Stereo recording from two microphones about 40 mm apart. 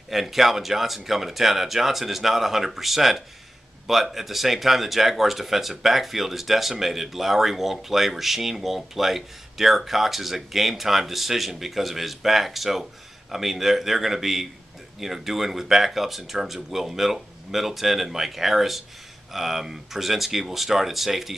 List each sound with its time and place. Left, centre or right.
0.1 s speech: centre